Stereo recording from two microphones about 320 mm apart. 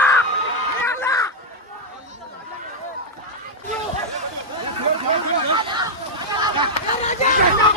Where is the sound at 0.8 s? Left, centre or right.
Centre.